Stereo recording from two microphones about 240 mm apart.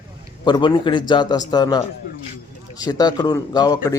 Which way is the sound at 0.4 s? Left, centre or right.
Centre.